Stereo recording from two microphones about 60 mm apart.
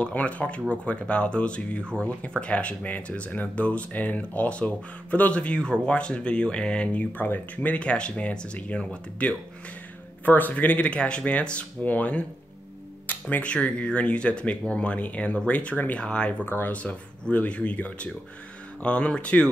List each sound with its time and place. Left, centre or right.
0.0 s speech: left
10.2 s speech: left
16.4 s speech: left
16.7 s speech: left